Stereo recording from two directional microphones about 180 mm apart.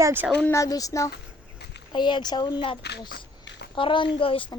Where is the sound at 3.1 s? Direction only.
75° left (ahead or behind).